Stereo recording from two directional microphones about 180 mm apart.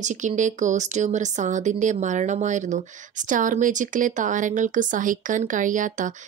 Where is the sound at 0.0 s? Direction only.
40° right (ahead or behind).